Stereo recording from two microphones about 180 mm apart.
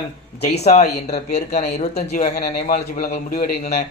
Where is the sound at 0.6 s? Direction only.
40° left (ahead or behind).